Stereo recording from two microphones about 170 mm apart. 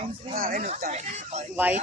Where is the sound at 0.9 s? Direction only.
40° right (ahead or behind).